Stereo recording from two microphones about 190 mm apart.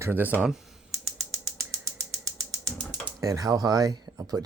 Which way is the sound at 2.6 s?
5° left (ahead or behind).